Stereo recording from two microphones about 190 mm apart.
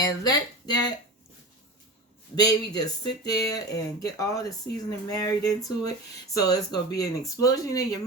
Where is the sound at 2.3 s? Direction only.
20° left (ahead or behind).